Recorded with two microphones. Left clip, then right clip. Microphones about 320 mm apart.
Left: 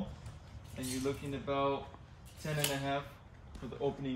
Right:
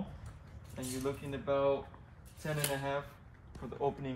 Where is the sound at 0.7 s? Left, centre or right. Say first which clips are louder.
Left 1 dB; centre.